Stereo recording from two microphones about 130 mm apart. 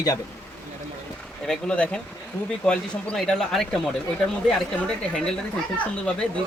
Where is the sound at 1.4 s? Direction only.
5° left (ahead or behind).